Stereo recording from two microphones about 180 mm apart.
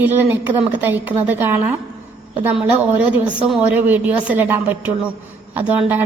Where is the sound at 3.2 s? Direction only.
5° right (ahead or behind).